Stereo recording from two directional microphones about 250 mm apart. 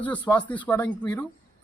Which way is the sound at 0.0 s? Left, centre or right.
Centre.